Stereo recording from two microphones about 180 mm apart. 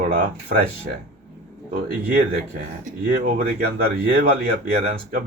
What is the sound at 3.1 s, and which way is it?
Speech, 55° right (ahead or behind).